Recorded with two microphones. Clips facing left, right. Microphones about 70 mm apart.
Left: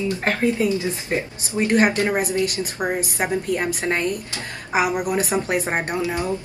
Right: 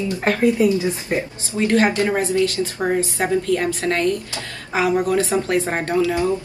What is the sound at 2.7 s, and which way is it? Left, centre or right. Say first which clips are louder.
A woman's voice: right 2 dB; centre.